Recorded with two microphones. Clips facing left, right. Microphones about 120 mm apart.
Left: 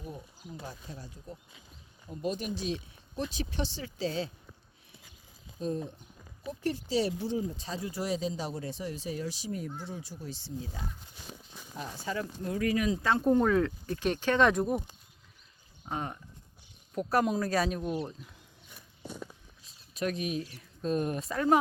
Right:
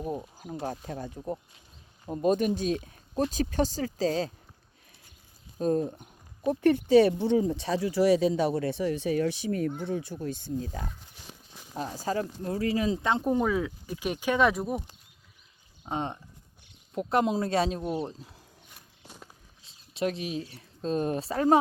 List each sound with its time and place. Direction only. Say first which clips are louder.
0.0 s speech: right 10 dB; 45° right (ahead or behind)
5.5 s speech: right 8 dB; 50° right (ahead or behind)
11.8 s speech: right 5 dB; 40° right (ahead or behind); by 13.2 s 20° right (ahead or behind)
13.2 s speech: left 5 dB; 10° right (ahead or behind)
15.9 s speech: right 4 dB; 25° right (ahead or behind)
19.6 s speech: right 3 dB; 25° right (ahead or behind)